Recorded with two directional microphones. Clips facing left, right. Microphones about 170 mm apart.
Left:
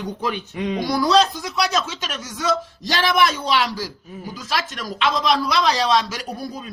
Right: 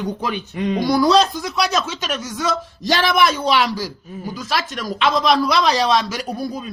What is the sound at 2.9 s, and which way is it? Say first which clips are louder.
Speech: right 2 dB; 50° right (ahead or behind).